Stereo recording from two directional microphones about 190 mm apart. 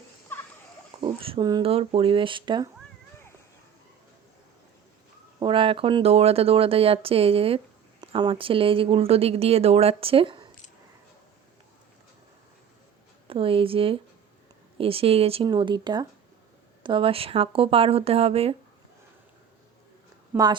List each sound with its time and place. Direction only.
1.0 s speech: 25° right (ahead or behind)
5.4 s speech: 25° right (ahead or behind)
13.2 s speech: 30° right (ahead or behind)
20.3 s a woman's voice: 20° right (ahead or behind)